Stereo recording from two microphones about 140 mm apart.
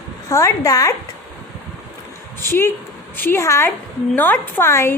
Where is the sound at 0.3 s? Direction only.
20° left (ahead or behind).